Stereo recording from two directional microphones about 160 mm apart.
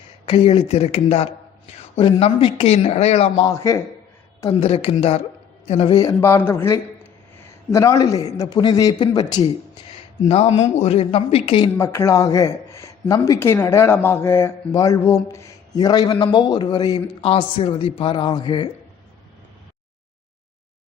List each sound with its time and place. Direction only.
0.3 s a man's voice: 35° left (ahead or behind)
3.4 s speech: 20° left (ahead or behind)
4.6 s a man's voice: 35° left (ahead or behind)
6.0 s speech: 20° left (ahead or behind)
10.2 s a man's voice: 35° left (ahead or behind)
11.8 s a man's voice: 15° left (ahead or behind)